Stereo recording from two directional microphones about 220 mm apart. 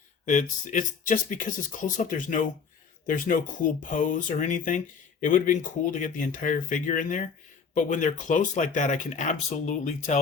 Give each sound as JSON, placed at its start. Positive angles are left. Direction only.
{"t": 0.3, "sound": "speech", "side_deg": 35}